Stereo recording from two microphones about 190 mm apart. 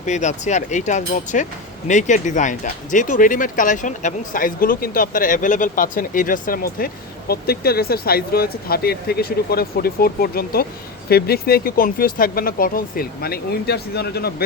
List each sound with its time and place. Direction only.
0.0 s speech: 40° left (ahead or behind); by 14.4 s 55° left (ahead or behind)